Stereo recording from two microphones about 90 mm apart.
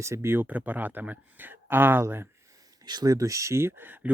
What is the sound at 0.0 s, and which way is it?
Speech, 30° right (ahead or behind).